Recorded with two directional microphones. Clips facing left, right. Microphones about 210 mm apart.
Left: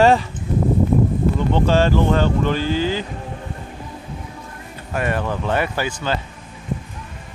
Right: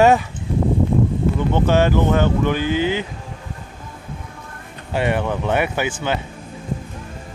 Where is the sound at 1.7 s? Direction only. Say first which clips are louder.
Right 1 dB; 15° right (ahead or behind).